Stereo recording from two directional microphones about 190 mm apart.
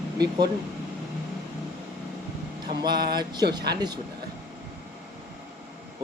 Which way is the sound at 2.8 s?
20° right (ahead or behind).